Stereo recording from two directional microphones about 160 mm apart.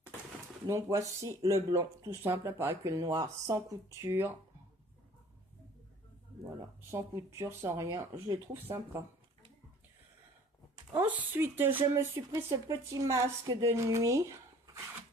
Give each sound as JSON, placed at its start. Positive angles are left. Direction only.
{"t": 0.7, "sound": "speech", "side_deg": -20}
{"t": 6.9, "sound": "speech", "side_deg": -15}
{"t": 10.9, "sound": "speech", "side_deg": -10}